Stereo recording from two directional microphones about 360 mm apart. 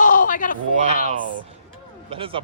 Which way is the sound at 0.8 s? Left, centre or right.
Centre.